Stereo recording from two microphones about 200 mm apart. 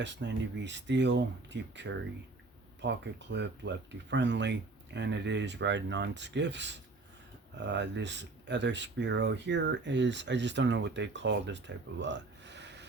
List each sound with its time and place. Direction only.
0.0 s speech: 60° right (ahead or behind)